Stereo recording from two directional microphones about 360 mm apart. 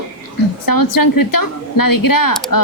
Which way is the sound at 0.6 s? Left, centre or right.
Left.